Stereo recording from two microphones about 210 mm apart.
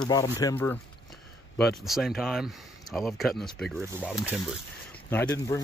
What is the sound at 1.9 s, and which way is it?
Speech, centre (ahead or behind).